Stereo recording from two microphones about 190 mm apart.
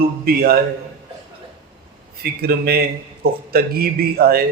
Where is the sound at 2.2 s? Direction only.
55° right (ahead or behind).